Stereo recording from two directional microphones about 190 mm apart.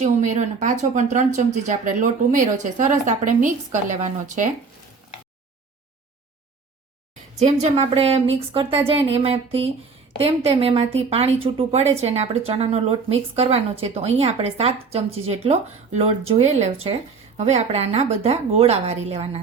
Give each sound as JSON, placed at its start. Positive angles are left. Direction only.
{"t": 0.0, "sound": "a woman's voice", "side_deg": -40}
{"t": 7.3, "sound": "a woman's voice", "side_deg": -35}